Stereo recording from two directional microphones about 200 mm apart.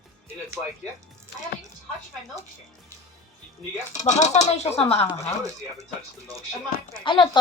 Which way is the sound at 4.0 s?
35° left (ahead or behind).